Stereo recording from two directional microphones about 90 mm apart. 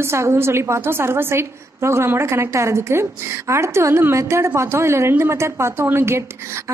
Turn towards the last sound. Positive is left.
turn(degrees=-30)  # may be behind; listen again after turning